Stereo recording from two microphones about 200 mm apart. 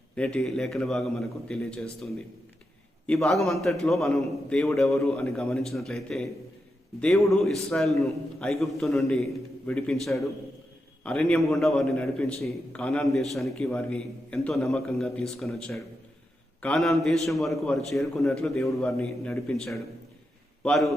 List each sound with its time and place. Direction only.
0.2 s a man's voice: 5° left (ahead or behind)
3.1 s a man's voice: centre (ahead or behind)